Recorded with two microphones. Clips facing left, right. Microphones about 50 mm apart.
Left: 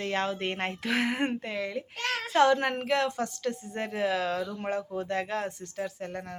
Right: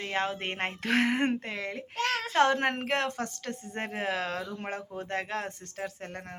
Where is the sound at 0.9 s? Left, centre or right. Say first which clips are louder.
Right 2 dB; right.